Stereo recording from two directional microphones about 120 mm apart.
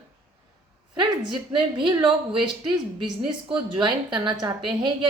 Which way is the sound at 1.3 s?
40° right (ahead or behind).